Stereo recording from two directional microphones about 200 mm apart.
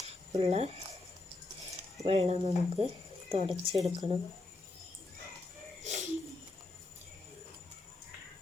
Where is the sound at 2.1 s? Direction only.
30° right (ahead or behind).